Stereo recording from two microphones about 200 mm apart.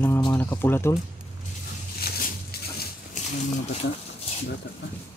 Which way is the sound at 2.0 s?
50° left (ahead or behind).